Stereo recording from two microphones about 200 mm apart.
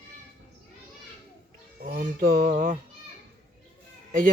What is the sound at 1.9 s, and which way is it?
Speech, 45° right (ahead or behind).